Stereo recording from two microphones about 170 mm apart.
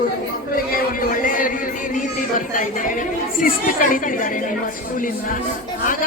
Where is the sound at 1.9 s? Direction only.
50° left (ahead or behind).